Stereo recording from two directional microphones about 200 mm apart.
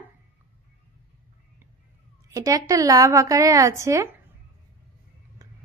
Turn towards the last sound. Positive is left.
turn(degrees=-15)  # may be behind; listen again after turning